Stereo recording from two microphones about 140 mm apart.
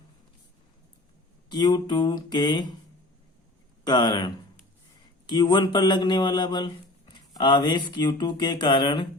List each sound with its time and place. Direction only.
1.5 s speech: 30° left (ahead or behind)
3.8 s speech: 30° left (ahead or behind)